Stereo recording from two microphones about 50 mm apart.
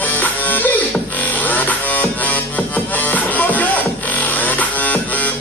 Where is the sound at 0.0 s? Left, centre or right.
Left.